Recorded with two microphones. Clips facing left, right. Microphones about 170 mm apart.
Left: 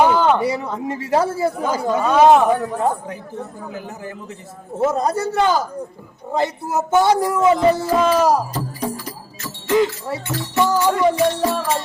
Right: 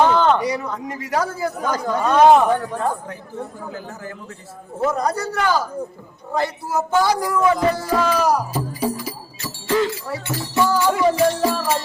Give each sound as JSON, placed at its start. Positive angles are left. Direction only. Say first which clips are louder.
{"t": 0.0, "sound": "a sound", "louder": "left 1 dB", "side_deg": 10}
{"t": 0.3, "sound": "speech", "louder": "left 2 dB", "side_deg": 25}
{"t": 2.0, "sound": "speech", "louder": "even", "side_deg": 5}
{"t": 3.7, "sound": "speech", "louder": "left 1 dB", "side_deg": 20}
{"t": 8.8, "sound": "music", "louder": "right 3 dB", "side_deg": -5}
{"t": 9.6, "sound": "music", "louder": "left 3 dB", "side_deg": 20}
{"t": 10.4, "sound": "speech", "louder": "left 1 dB", "side_deg": 20}
{"t": 10.9, "sound": "music", "louder": "even", "side_deg": -5}